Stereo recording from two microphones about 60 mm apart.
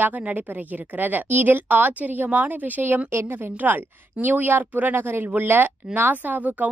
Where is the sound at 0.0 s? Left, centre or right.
Right.